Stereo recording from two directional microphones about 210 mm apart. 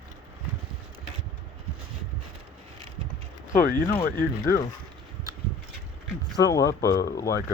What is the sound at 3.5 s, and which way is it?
Speech, 40° left (ahead or behind).